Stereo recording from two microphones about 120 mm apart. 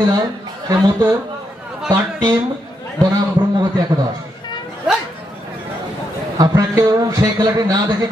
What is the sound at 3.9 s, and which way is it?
Speech, 30° right (ahead or behind).